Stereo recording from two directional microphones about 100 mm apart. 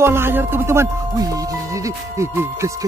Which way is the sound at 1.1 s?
35° right (ahead or behind).